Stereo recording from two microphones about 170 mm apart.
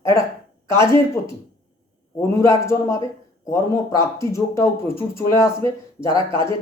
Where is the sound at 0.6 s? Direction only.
15° left (ahead or behind).